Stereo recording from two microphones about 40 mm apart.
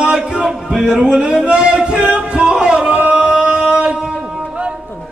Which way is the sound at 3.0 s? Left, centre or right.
Right.